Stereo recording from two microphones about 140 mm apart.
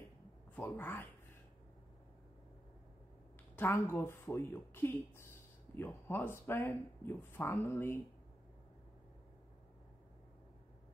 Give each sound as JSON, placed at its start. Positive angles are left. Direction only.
{"t": 0.6, "sound": "speech", "side_deg": 15}
{"t": 3.5, "sound": "speech", "side_deg": 15}